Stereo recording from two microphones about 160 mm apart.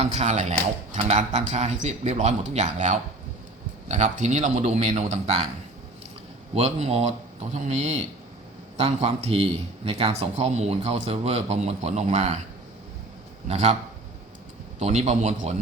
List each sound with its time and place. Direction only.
0.0 s speech: 40° right (ahead or behind)
6.5 s speech: 40° right (ahead or behind)
13.5 s speech: 40° right (ahead or behind)
14.8 s speech: 45° right (ahead or behind)